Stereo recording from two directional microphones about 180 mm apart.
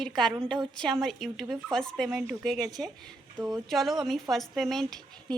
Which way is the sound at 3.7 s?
Centre (ahead or behind).